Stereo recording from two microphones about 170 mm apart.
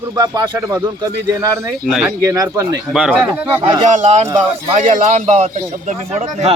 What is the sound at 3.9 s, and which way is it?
Speech, 45° right (ahead or behind).